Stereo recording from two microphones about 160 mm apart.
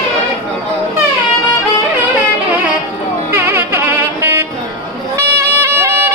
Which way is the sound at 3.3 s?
10° right (ahead or behind).